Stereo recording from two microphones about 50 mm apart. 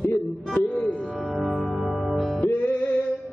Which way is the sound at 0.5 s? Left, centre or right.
Left.